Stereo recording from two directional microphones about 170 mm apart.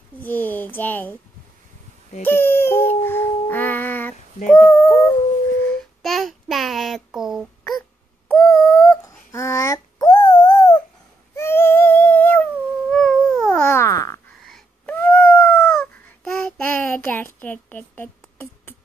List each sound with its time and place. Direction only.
0.2 s a child's voice: 10° left (ahead or behind)
2.2 s babbling: 15° left (ahead or behind)
4.5 s female singing: 10° left (ahead or behind)
5.6 s child singing: 5° left (ahead or behind)
8.3 s a sound: 5° left (ahead or behind); by 10.8 s 25° left (ahead or behind)
11.3 s a sound: 15° left (ahead or behind)
14.4 s wail: 5° left (ahead or behind)
15.0 s child singing: 15° left (ahead or behind)